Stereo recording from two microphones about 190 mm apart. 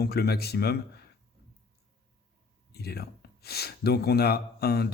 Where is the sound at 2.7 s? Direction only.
55° left (ahead or behind).